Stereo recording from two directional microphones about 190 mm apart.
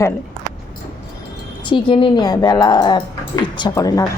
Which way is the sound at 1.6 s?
25° left (ahead or behind).